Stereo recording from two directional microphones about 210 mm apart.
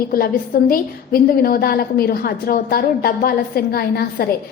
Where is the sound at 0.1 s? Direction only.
45° left (ahead or behind).